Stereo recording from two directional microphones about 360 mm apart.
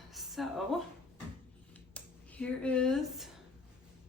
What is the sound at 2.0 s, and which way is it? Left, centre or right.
Speech, centre.